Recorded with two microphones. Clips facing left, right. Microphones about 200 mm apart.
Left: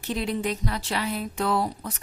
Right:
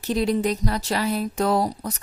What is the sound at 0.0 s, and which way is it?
Speech, 40° right (ahead or behind).